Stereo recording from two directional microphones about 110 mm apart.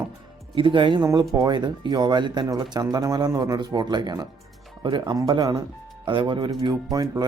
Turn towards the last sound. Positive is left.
turn(degrees=-35)  # may be behind; listen again after turning